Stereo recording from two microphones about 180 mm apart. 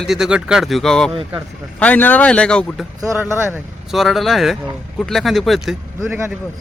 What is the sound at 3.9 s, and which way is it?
Speech, centre (ahead or behind).